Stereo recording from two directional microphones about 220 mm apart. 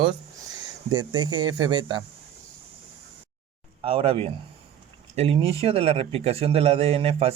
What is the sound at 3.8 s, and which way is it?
Speech, 25° right (ahead or behind).